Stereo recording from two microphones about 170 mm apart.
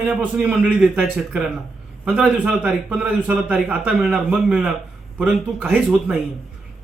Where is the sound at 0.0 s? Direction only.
5° right (ahead or behind).